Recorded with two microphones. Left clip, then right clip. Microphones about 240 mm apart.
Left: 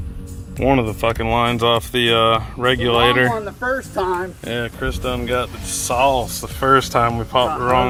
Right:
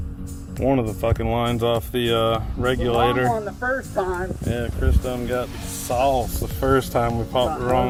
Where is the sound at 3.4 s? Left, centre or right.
Left.